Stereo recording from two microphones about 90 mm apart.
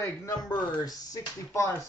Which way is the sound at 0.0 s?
35° left (ahead or behind).